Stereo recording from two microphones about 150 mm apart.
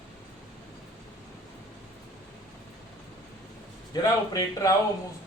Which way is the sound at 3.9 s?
25° left (ahead or behind).